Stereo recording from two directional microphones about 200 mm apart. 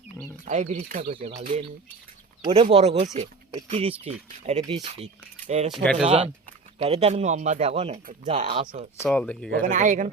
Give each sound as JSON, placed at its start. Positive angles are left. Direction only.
{"t": 0.4, "sound": "speech", "side_deg": -35}
{"t": 5.7, "sound": "speech", "side_deg": 0}
{"t": 6.1, "sound": "speech", "side_deg": -30}
{"t": 9.0, "sound": "speech", "side_deg": 5}
{"t": 9.6, "sound": "speech", "side_deg": -40}